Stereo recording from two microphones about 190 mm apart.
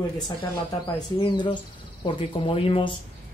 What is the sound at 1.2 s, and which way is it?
Speech, 25° left (ahead or behind).